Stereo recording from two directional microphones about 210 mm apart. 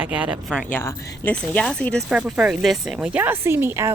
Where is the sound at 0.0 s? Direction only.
5° right (ahead or behind).